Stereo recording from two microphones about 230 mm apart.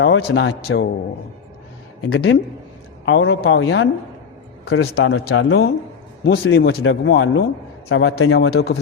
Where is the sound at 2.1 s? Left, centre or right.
Left.